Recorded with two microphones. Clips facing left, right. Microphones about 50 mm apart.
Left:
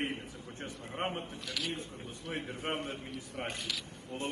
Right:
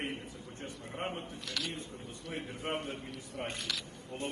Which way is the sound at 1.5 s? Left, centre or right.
Centre.